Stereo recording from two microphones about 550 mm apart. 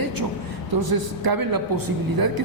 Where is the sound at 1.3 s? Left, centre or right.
Right.